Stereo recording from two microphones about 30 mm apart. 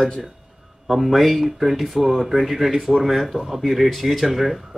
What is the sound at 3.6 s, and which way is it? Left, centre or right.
Speech, centre.